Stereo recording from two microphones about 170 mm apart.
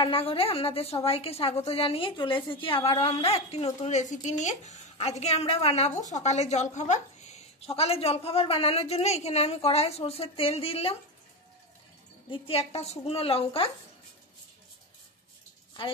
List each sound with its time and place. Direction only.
0.0 s a woman's voice: 35° left (ahead or behind)
12.3 s a woman's voice: 35° left (ahead or behind)